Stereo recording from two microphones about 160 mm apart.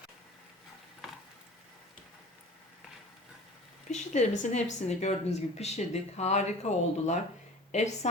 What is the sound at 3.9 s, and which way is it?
A woman's voice, 45° left (ahead or behind).